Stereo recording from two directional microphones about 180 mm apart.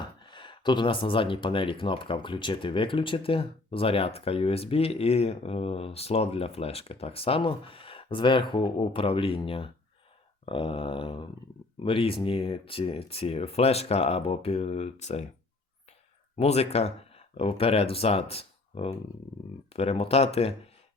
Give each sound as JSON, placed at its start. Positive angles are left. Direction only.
{"t": 0.2, "sound": "speech", "side_deg": 25}
{"t": 10.4, "sound": "a sound", "side_deg": 30}
{"t": 11.8, "sound": "speech", "side_deg": 30}
{"t": 16.4, "sound": "speech", "side_deg": 35}